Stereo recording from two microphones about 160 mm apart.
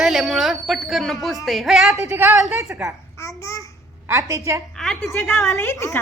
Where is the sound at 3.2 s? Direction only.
20° left (ahead or behind).